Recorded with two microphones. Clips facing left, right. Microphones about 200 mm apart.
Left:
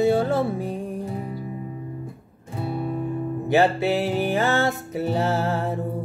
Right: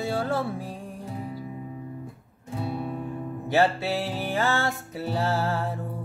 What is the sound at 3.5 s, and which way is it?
Music, 15° left (ahead or behind).